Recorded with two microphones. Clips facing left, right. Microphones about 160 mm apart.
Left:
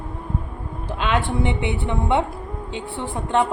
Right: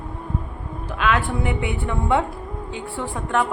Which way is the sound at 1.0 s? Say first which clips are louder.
Even; 25° left (ahead or behind).